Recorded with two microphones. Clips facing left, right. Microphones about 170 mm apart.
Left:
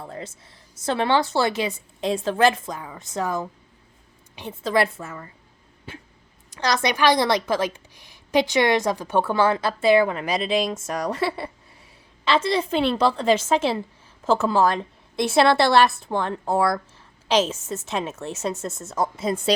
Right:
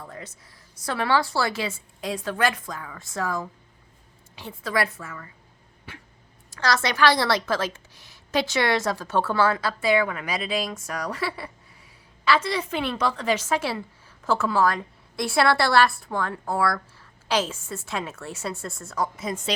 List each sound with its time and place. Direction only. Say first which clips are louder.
0.0 s a woman's voice: left 5 dB; 30° left (ahead or behind)